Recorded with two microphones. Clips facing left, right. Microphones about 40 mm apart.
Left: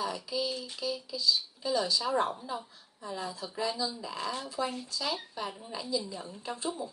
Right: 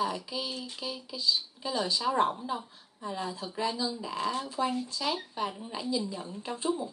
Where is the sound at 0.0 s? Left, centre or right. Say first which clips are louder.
Right 3 dB; centre.